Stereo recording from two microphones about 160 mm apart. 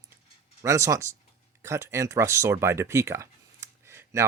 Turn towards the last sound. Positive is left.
turn(degrees=-15)  # may be behind; listen again after turning